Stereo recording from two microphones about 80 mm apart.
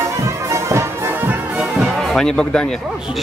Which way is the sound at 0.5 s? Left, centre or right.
Right.